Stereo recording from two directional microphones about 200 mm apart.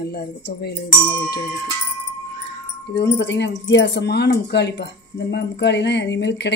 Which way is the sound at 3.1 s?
60° left (ahead or behind).